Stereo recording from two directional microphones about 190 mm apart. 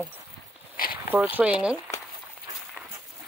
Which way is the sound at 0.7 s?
50° left (ahead or behind).